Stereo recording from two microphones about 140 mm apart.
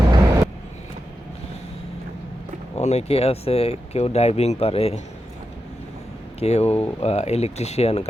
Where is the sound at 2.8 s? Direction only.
50° left (ahead or behind).